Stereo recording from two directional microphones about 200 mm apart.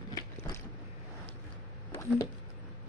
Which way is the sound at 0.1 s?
15° left (ahead or behind).